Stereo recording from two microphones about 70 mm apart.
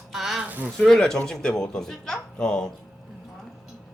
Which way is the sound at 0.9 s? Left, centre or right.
Centre.